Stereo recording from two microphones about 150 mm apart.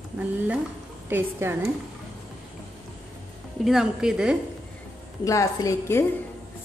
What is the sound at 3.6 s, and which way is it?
Speech, 5° right (ahead or behind).